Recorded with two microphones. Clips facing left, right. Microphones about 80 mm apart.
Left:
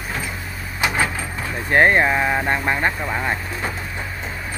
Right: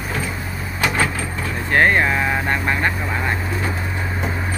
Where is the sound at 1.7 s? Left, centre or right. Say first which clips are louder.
Left 1 dB; centre.